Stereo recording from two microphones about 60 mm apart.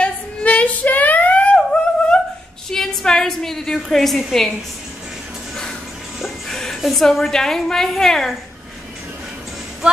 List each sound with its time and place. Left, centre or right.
0.0 s female singing: left
2.7 s a sound: centre
6.1 s a woman's voice: centre